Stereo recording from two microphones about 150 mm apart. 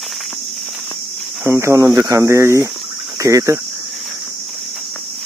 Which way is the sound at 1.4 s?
20° right (ahead or behind).